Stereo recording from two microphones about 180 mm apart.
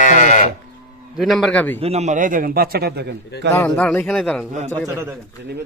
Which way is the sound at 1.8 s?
35° right (ahead or behind).